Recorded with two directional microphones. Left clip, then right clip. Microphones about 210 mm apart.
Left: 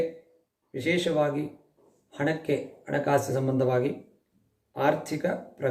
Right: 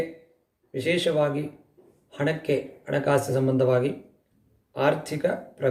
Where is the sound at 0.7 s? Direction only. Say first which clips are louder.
Right 2 dB; 5° right (ahead or behind).